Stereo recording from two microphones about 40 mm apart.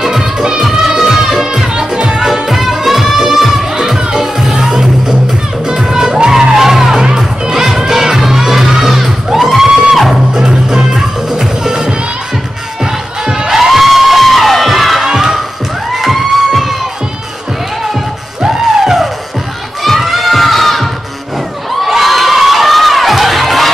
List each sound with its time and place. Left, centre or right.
0.0 s music: centre
2.3 s music: centre
10.3 s music: centre
13.5 s music: centre
18.4 s music: centre
19.8 s crowd: centre
21.8 s children shouting: centre